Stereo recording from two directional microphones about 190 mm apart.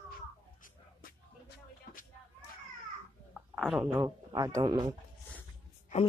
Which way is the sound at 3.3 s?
5° right (ahead or behind).